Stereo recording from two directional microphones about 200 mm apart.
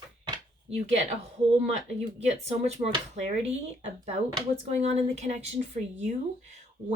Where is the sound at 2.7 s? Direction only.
35° right (ahead or behind).